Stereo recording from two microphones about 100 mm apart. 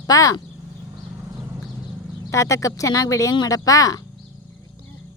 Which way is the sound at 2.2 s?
30° left (ahead or behind).